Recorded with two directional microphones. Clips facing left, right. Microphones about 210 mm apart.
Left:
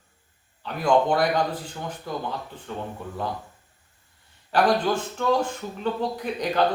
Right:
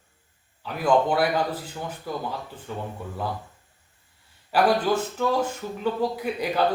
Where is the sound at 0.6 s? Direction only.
5° right (ahead or behind).